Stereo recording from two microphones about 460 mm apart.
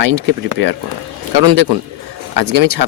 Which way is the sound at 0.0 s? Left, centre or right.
Right.